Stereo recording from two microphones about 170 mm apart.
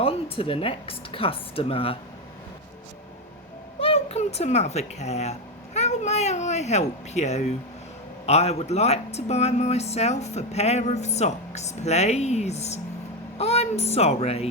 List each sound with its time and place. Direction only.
0.0 s speech: 35° left (ahead or behind)
3.8 s speech: 35° left (ahead or behind)